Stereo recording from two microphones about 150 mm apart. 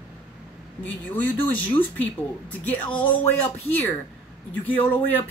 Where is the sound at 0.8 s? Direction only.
10° left (ahead or behind).